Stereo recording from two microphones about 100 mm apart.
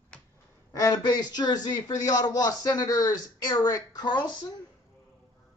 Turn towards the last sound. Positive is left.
turn(degrees=45)  # may be behind; listen again after turning